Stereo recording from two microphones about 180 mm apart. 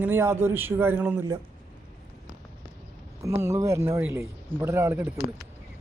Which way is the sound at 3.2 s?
15° right (ahead or behind).